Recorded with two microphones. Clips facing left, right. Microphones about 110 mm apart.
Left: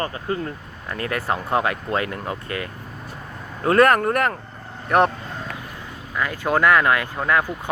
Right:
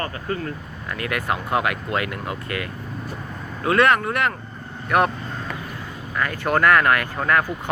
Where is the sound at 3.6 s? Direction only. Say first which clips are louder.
Left 2 dB; 45° left (ahead or behind).